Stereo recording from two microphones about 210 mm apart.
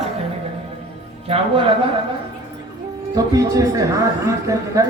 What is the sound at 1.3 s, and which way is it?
Speech, 25° right (ahead or behind).